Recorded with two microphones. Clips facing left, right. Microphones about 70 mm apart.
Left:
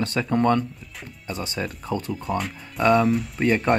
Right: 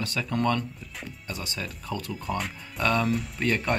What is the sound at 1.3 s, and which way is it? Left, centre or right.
Speech, left.